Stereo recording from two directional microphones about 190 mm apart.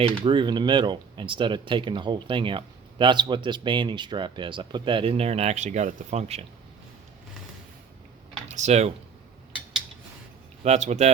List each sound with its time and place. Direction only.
0.3 s speech: 25° right (ahead or behind)
8.4 s speech: 35° right (ahead or behind)
10.6 s speech: 35° right (ahead or behind)